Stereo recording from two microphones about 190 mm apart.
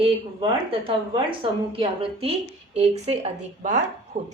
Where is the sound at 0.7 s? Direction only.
30° right (ahead or behind).